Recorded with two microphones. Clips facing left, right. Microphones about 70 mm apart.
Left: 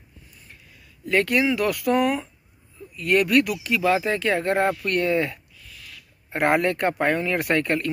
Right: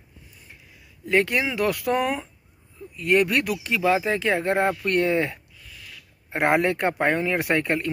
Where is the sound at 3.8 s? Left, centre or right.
Centre.